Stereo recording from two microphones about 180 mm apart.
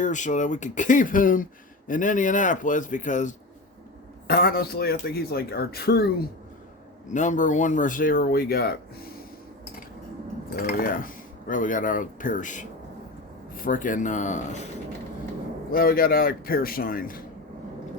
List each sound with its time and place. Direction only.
0.0 s speech: 45° left (ahead or behind)
4.3 s speech: 55° left (ahead or behind)
7.1 s speech: 45° left (ahead or behind)
10.5 s speech: 55° left (ahead or behind)
15.7 s speech: 55° left (ahead or behind)